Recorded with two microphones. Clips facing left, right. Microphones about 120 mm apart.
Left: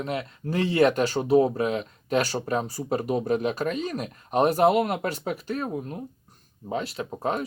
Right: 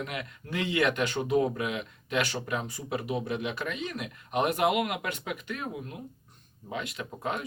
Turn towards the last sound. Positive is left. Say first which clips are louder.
# left 6 dB
turn(degrees=35)  # may be behind; listen again after turning